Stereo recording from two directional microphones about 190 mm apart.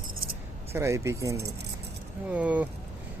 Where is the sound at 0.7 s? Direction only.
15° right (ahead or behind).